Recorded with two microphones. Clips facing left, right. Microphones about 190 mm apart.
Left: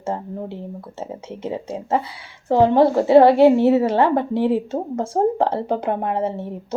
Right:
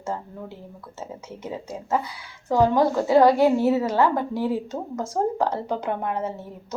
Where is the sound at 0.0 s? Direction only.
30° left (ahead or behind).